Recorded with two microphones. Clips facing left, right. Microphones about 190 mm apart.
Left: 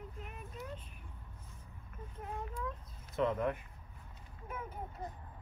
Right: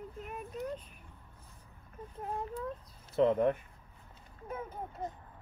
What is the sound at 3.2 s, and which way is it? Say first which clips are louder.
Speech: right 6 dB; 30° right (ahead or behind).